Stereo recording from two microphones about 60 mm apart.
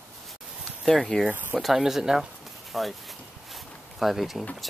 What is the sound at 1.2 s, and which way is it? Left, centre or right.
Speech, right.